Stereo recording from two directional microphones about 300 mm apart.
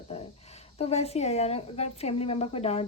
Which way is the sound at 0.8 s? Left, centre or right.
Centre.